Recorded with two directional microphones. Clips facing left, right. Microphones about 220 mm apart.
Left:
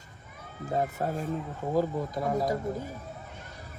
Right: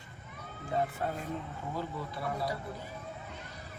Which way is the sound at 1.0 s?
40° left (ahead or behind).